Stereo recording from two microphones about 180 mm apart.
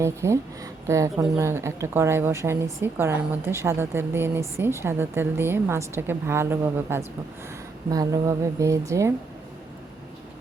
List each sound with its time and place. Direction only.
0.0 s a woman's voice: 15° right (ahead or behind)